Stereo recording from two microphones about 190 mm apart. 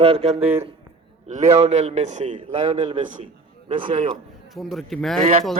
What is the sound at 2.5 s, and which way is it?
Speech, 25° right (ahead or behind).